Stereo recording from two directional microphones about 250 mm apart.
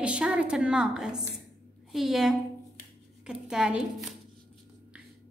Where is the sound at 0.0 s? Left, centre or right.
Centre.